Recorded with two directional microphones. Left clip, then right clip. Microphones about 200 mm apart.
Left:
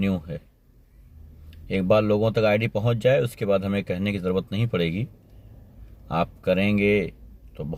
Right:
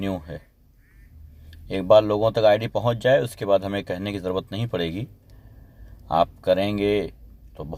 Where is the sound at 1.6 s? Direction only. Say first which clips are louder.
Right 4 dB; 50° right (ahead or behind).